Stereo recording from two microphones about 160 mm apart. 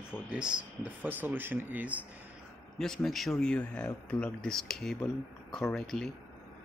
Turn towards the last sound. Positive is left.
turn(degrees=5)  # may be behind; listen again after turning